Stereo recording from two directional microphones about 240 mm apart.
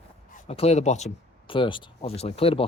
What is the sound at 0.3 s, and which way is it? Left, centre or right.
Speech, left.